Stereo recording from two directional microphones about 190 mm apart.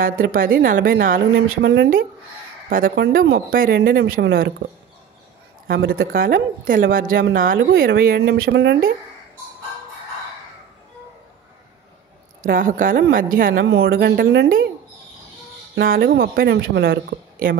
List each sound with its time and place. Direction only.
0.0 s speech: 50° right (ahead or behind); by 1.9 s 65° right (ahead or behind)
2.7 s speech: 50° right (ahead or behind)
5.7 s speech: 55° right (ahead or behind)
12.4 s speech: 45° right (ahead or behind)
13.7 s speech: 90° right
13.9 s speech: 55° right (ahead or behind)
15.7 s speech: 55° right (ahead or behind)